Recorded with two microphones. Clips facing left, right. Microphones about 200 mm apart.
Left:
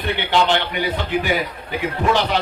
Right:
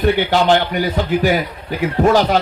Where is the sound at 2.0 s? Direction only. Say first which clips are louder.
Right 6 dB; 40° right (ahead or behind).